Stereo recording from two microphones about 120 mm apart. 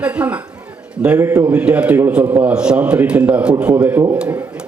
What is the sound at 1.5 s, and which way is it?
A woman's voice, 10° right (ahead or behind).